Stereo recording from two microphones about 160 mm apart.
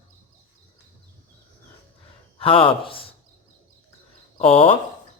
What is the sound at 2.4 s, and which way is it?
Speech, 35° left (ahead or behind).